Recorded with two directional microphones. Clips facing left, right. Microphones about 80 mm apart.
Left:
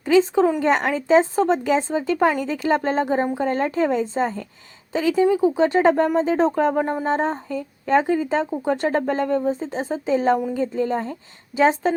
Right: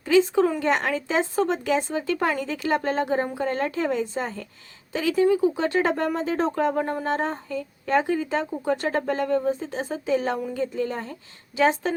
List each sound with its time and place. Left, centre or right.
0.1 s speech: left